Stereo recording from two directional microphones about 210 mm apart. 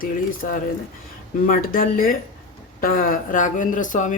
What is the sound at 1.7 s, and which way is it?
Speech, 40° left (ahead or behind).